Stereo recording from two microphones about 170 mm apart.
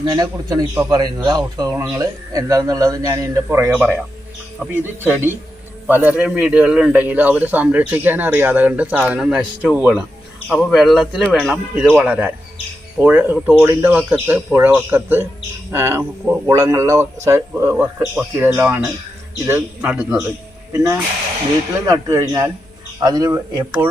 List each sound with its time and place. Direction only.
0.0 s a man's voice: 25° right (ahead or behind)
3.7 s a man's voice: 5° right (ahead or behind); by 23.6 s 20° right (ahead or behind)